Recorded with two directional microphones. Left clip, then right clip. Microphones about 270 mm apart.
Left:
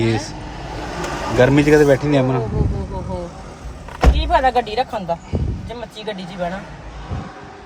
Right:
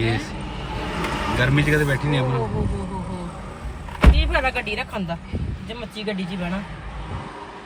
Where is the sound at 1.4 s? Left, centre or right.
Left.